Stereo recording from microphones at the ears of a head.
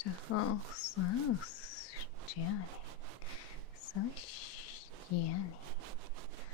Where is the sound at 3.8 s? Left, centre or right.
Left.